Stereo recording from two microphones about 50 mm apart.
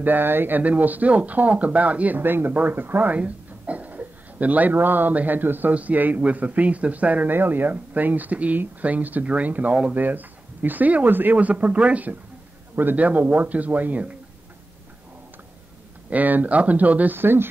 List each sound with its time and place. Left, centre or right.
0.0 s speech: right
2.1 s speech: right
7.3 s speech: right
16.1 s speech: right
17.2 s speech: right